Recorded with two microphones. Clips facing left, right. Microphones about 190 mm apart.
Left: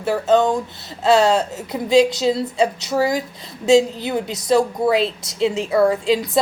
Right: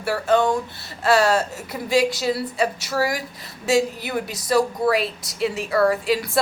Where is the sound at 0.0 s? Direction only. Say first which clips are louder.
Left 3 dB; 20° left (ahead or behind).